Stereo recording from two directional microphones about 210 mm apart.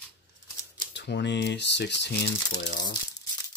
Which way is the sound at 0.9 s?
55° left (ahead or behind).